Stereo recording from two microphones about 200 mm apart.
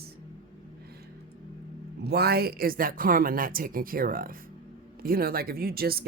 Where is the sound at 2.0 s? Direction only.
50° right (ahead or behind).